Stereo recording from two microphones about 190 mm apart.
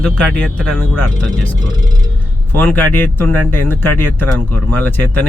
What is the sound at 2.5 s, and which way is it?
Speech, 10° left (ahead or behind).